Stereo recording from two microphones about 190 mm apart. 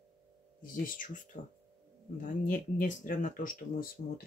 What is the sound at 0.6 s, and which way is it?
Speech, 45° left (ahead or behind).